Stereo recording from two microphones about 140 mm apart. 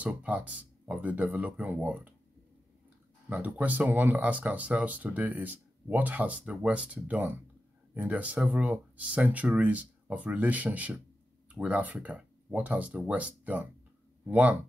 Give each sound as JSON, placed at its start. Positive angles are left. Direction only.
{"t": 0.0, "sound": "speech", "side_deg": -10}
{"t": 3.3, "sound": "speech", "side_deg": -10}